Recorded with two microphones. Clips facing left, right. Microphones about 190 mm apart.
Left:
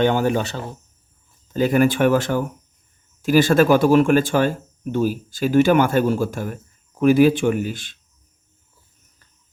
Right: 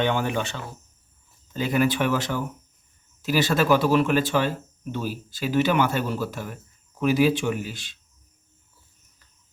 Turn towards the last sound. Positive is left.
turn(degrees=50)  # may be behind; listen again after turning